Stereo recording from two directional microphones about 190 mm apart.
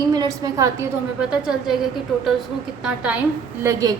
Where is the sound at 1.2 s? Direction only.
5° right (ahead or behind).